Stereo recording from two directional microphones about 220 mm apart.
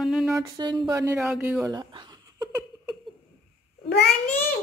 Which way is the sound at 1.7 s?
20° right (ahead or behind).